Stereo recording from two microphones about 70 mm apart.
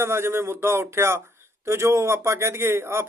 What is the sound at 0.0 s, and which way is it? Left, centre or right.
Speech, right.